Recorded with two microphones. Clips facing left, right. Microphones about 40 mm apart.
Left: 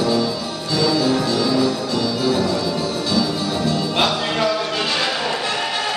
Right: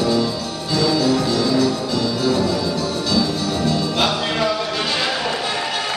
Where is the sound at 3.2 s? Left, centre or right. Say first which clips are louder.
Even; centre.